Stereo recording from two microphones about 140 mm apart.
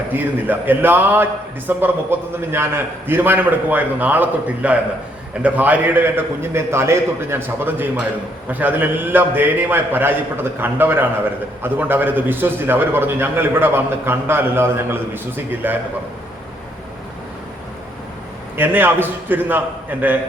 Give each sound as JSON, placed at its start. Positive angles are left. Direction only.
{"t": 0.1, "sound": "a man's voice", "side_deg": -15}
{"t": 18.5, "sound": "a man's voice", "side_deg": -15}